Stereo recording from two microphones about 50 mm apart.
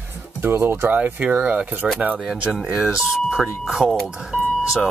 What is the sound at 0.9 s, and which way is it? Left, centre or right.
Speech, right.